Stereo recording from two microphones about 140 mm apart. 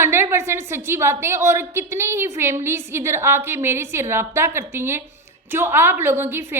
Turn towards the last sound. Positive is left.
turn(degrees=-15)  # may be behind; listen again after turning